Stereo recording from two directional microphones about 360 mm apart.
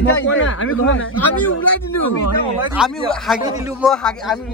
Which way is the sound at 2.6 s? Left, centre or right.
Centre.